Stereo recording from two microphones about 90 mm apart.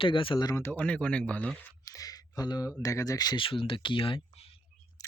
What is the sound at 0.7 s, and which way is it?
Speech, 15° left (ahead or behind).